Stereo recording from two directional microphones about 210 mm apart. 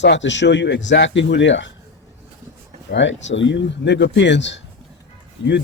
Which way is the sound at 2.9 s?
60° left (ahead or behind).